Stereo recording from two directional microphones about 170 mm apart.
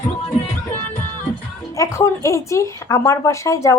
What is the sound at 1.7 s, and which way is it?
Speech, 20° left (ahead or behind).